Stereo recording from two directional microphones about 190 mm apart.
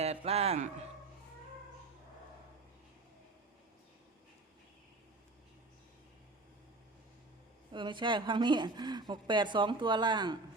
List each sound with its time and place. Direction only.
0.0 s a man's voice: 35° right (ahead or behind)
7.7 s a woman's voice: 25° right (ahead or behind)